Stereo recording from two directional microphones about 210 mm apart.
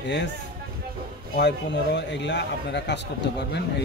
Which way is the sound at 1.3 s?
55° left (ahead or behind).